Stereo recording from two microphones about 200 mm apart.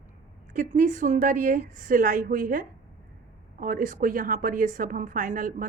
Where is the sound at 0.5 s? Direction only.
40° right (ahead or behind).